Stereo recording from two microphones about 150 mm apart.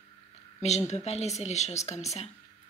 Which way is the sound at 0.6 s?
50° left (ahead or behind).